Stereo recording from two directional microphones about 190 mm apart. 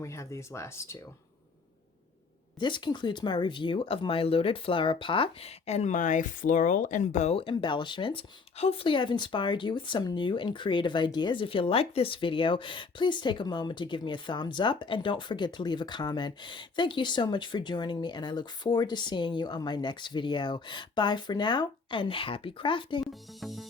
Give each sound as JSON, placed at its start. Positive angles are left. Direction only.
{"t": 0.0, "sound": "speech", "side_deg": 15}
{"t": 2.6, "sound": "speech", "side_deg": 25}
{"t": 23.4, "sound": "music", "side_deg": 0}